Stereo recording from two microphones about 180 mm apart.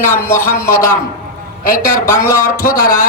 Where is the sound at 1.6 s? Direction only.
50° left (ahead or behind).